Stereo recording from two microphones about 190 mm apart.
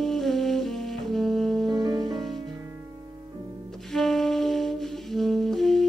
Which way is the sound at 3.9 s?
Centre (ahead or behind).